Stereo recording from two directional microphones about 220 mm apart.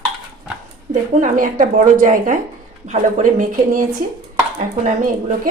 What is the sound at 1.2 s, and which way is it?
A woman's voice, 35° right (ahead or behind).